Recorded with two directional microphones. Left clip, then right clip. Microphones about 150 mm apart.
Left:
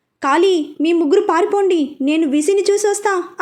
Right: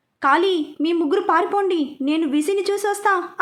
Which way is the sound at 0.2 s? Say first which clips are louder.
Left 3 dB; 20° left (ahead or behind).